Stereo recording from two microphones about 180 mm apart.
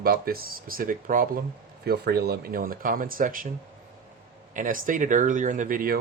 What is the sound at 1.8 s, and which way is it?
Speech, 60° right (ahead or behind).